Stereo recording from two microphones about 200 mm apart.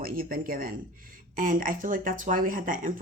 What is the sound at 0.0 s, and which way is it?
Speech, 45° right (ahead or behind).